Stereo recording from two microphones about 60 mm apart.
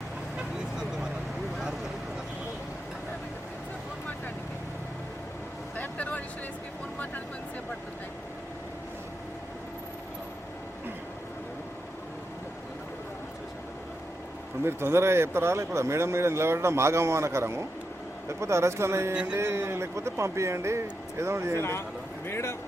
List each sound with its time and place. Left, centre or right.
5.7 s vehicle: left
14.6 s speech: right
19.1 s mantra: centre
19.4 s speech: right
21.6 s a man's voice: left